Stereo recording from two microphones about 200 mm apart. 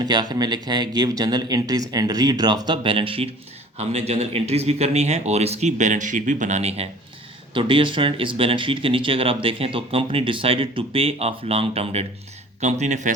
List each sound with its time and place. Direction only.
0.0 s a man's voice: 20° right (ahead or behind); by 13.1 s 35° right (ahead or behind)